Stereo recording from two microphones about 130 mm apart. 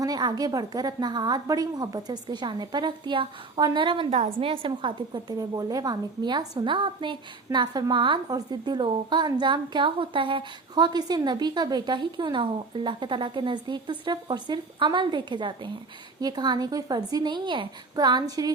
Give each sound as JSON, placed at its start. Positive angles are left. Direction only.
{"t": 0.0, "sound": "a woman's voice", "side_deg": -35}